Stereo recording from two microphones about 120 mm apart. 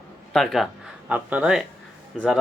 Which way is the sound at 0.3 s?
Centre (ahead or behind).